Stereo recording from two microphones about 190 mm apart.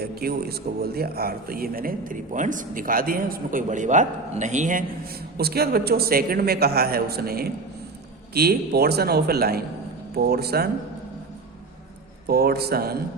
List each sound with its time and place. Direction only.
0.0 s a man's voice: 55° right (ahead or behind)
5.4 s a man's voice: 55° right (ahead or behind)
12.3 s a man's voice: 55° right (ahead or behind)